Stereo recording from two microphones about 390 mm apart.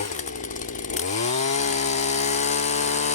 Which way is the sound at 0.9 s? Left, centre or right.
Centre.